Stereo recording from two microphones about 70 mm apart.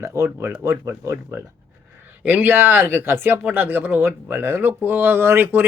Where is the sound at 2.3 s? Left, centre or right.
Right.